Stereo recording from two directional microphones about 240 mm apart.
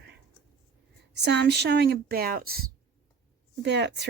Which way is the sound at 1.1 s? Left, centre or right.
Right.